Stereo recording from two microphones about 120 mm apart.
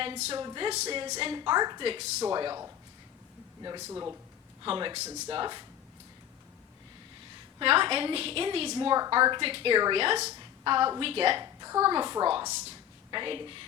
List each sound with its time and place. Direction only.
0.3 s a woman's voice: 40° right (ahead or behind)
0.7 s a woman's voice: 65° right (ahead or behind)
1.2 s a woman's voice: 40° right (ahead or behind)
1.8 s a woman's voice: 55° right (ahead or behind)
2.2 s a woman's voice: 35° right (ahead or behind)
3.8 s speech: 20° right (ahead or behind)
4.6 s a woman's voice: 45° right (ahead or behind)
7.6 s a woman's voice: 50° right (ahead or behind)
8.7 s a woman's voice: 35° right (ahead or behind); by 10.2 s 50° right (ahead or behind)
10.6 s a woman's voice: 40° right (ahead or behind)
11.0 s a woman's voice: 50° right (ahead or behind)
11.6 s a woman's voice: 25° right (ahead or behind); by 13.7 s 45° right (ahead or behind)